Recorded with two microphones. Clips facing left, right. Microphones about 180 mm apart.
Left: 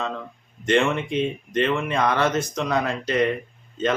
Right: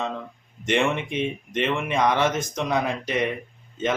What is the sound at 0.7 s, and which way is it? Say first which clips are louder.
Speech: left 2 dB; 15° right (ahead or behind).